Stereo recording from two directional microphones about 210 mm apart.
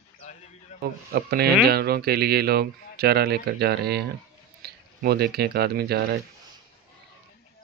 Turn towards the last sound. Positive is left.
turn(degrees=-50)  # may be behind; listen again after turning